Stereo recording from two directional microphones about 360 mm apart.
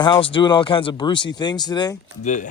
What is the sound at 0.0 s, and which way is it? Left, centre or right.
Speech, centre.